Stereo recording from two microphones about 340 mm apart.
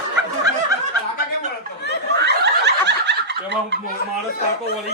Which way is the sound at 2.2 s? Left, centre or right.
Right.